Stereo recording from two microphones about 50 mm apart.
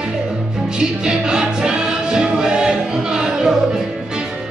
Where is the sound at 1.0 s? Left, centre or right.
Centre.